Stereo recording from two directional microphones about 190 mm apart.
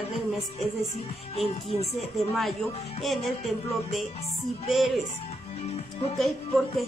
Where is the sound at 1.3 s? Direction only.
35° left (ahead or behind).